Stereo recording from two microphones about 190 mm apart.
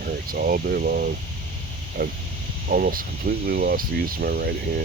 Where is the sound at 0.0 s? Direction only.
50° right (ahead or behind).